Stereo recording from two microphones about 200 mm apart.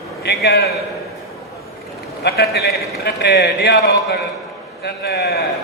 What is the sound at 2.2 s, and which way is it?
A man's voice, 55° left (ahead or behind).